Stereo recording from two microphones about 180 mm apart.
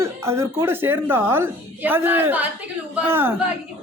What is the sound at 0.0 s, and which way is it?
A woman's voice, 15° right (ahead or behind).